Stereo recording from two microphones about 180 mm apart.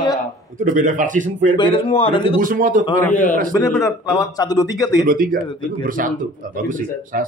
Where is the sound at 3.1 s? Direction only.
45° left (ahead or behind).